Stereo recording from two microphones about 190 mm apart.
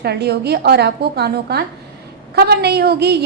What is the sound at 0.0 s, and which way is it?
A woman's voice, 60° right (ahead or behind).